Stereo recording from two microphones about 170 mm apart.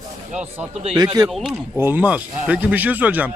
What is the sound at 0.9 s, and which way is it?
Speech, 20° right (ahead or behind).